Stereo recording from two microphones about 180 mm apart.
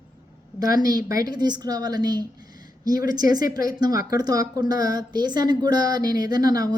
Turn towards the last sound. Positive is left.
turn(degrees=-20)  # may be behind; listen again after turning